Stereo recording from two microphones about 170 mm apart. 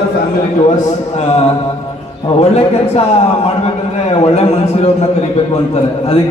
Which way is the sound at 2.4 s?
35° left (ahead or behind).